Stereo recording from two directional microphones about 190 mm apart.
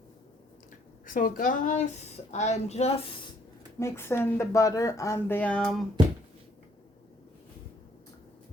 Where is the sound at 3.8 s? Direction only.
10° left (ahead or behind).